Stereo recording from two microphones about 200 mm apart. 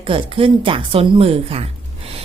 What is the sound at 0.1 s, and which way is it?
A woman's voice, 25° right (ahead or behind).